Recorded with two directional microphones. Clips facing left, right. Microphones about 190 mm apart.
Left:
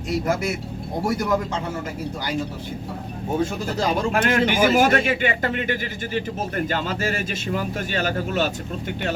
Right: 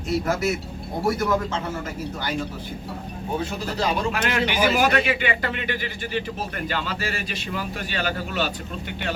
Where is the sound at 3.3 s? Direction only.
45° left (ahead or behind).